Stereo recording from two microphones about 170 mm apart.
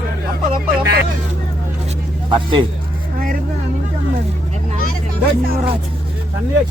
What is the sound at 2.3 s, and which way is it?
Speech, 30° right (ahead or behind).